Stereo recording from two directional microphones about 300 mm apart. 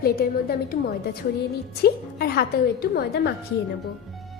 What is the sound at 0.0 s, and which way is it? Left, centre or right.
Speech, left.